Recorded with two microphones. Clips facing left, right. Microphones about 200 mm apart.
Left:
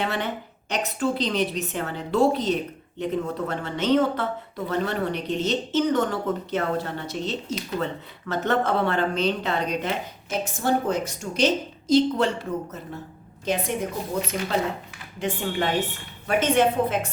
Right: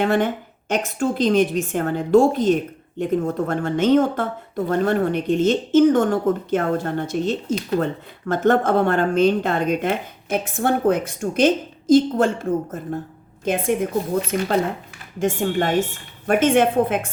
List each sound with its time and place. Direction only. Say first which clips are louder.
0.0 s speech: right 8 dB; 50° right (ahead or behind)
15.2 s speech: right 6 dB; 45° right (ahead or behind)